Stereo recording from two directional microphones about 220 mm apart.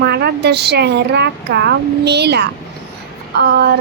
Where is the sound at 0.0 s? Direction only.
50° right (ahead or behind).